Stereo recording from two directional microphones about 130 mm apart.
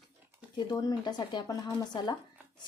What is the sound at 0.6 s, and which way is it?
Speech, 30° left (ahead or behind).